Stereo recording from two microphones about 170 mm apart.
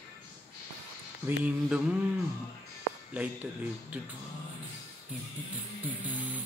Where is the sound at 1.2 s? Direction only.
10° right (ahead or behind).